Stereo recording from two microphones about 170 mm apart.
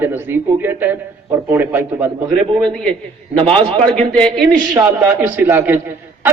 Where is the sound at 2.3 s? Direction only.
5° left (ahead or behind).